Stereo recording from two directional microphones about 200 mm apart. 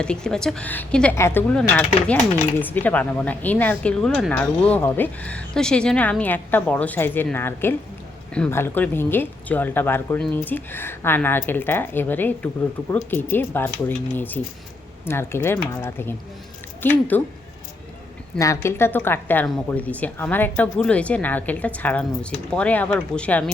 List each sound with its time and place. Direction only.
0.0 s speech: 5° left (ahead or behind)
18.3 s speech: 15° left (ahead or behind)